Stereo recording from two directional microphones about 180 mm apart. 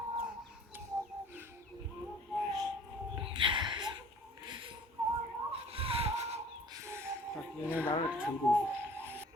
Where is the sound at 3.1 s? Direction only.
30° right (ahead or behind).